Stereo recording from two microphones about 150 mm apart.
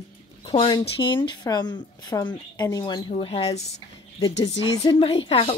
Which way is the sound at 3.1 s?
40° left (ahead or behind).